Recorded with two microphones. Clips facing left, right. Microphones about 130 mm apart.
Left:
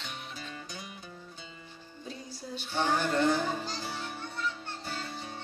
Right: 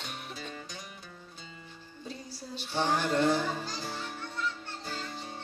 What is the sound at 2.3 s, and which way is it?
Music, 35° right (ahead or behind).